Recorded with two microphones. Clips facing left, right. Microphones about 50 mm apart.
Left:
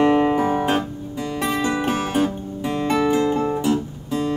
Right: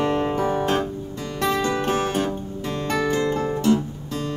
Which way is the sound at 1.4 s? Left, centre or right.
Centre.